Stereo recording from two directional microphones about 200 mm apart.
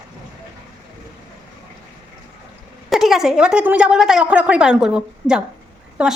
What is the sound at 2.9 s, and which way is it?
A woman's voice, centre (ahead or behind).